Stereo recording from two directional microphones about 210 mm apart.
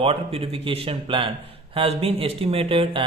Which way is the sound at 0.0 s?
25° right (ahead or behind).